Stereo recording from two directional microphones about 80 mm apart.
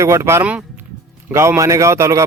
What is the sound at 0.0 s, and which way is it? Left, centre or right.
A man's voice, right.